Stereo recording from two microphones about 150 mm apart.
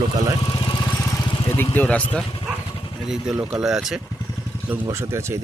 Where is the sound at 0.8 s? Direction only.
15° left (ahead or behind).